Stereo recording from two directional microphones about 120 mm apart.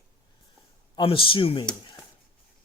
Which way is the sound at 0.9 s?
45° left (ahead or behind).